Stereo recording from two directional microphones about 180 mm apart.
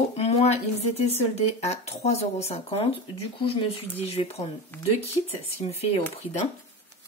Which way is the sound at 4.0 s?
35° left (ahead or behind).